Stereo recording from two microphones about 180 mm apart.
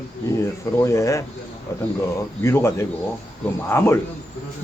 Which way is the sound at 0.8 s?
15° left (ahead or behind).